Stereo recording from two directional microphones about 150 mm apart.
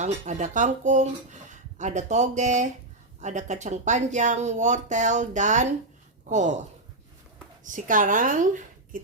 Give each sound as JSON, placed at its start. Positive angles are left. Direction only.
{"t": 0.0, "sound": "a woman's voice", "side_deg": -50}